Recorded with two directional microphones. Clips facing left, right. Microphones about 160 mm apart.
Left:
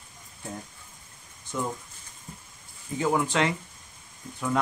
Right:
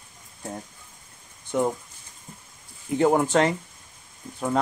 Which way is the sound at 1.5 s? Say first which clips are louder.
Right 8 dB; 65° right (ahead or behind).